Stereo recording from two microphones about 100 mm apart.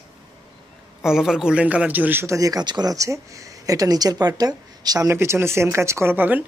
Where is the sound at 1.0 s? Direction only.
5° right (ahead or behind).